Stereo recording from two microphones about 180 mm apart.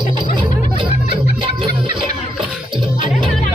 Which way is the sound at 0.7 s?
30° right (ahead or behind).